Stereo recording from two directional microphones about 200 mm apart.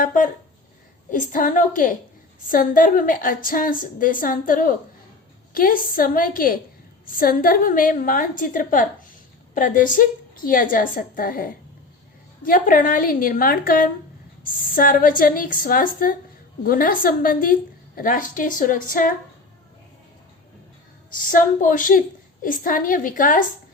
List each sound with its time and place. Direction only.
0.0 s a woman's voice: 40° left (ahead or behind)
21.2 s a woman's voice: 40° left (ahead or behind)